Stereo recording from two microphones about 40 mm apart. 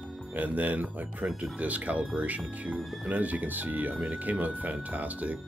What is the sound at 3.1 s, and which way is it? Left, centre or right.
Speech, right.